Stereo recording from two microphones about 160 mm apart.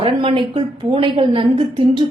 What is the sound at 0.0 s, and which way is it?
A woman's voice, 35° right (ahead or behind).